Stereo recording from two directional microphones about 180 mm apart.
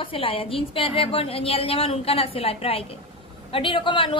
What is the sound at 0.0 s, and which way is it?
A woman's voice, 30° left (ahead or behind).